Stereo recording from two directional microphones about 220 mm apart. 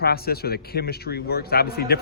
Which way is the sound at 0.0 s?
45° left (ahead or behind).